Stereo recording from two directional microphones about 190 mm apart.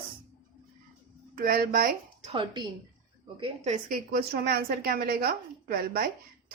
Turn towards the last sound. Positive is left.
turn(degrees=-50)  # may be behind; listen again after turning